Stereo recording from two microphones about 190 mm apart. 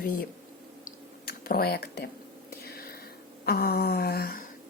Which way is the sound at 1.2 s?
55° left (ahead or behind).